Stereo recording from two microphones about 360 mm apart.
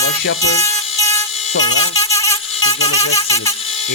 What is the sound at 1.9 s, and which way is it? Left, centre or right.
Mosquito, centre.